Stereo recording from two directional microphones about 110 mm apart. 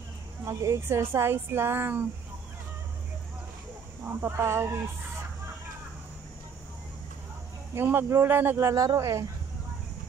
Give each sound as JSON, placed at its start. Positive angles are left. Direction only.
{"t": 0.5, "sound": "speech", "side_deg": -30}
{"t": 4.0, "sound": "speech", "side_deg": -20}
{"t": 7.7, "sound": "speech", "side_deg": -20}